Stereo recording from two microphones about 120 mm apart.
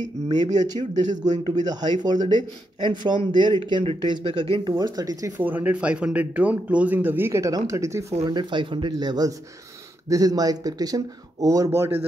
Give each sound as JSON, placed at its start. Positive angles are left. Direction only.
{"t": 0.4, "sound": "speech", "side_deg": -35}
{"t": 0.9, "sound": "speech", "side_deg": -85}
{"t": 1.4, "sound": "speech", "side_deg": -35}
{"t": 5.4, "sound": "a man's voice", "side_deg": -15}
{"t": 8.3, "sound": "speech", "side_deg": -40}